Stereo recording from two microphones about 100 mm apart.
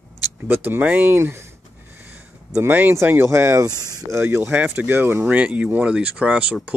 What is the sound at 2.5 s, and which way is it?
Speech, 20° right (ahead or behind).